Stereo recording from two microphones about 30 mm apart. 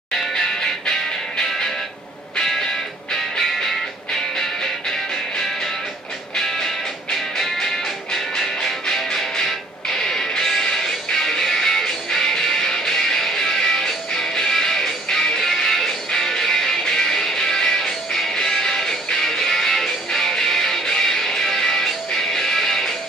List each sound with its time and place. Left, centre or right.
3.3 s music: centre
7.3 s music: centre